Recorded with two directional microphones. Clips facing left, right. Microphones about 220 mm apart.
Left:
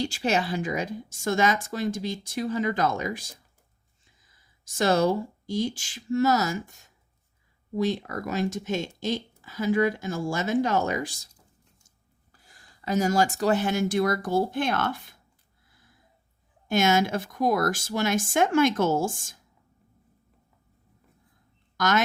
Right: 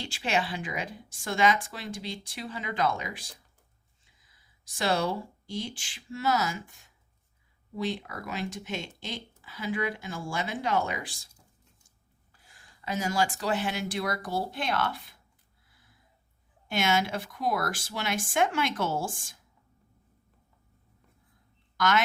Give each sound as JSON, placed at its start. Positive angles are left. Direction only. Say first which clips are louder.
{"t": 0.0, "sound": "a woman's voice", "louder": "left 5 dB", "side_deg": 40}
{"t": 4.6, "sound": "a woman's voice", "louder": "left 6 dB", "side_deg": 45}
{"t": 12.3, "sound": "speech", "louder": "left 2 dB", "side_deg": 40}
{"t": 16.6, "sound": "a woman's voice", "louder": "left 5 dB", "side_deg": 45}
{"t": 21.8, "sound": "speech", "louder": "left 2 dB", "side_deg": 40}